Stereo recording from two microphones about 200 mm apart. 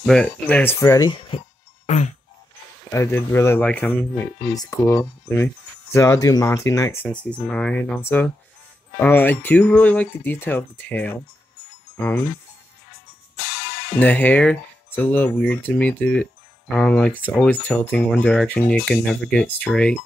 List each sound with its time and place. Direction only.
0.0 s speech: 5° left (ahead or behind)
1.3 s speech: 25° left (ahead or behind)
1.9 s a sound: 35° left (ahead or behind)
2.9 s speech: 10° left (ahead or behind)
13.9 s speech: 5° left (ahead or behind)